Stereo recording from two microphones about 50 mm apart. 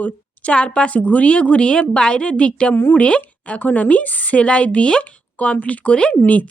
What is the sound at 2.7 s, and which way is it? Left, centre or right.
Speech, left.